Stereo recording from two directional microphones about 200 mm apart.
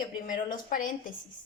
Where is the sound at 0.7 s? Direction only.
40° left (ahead or behind).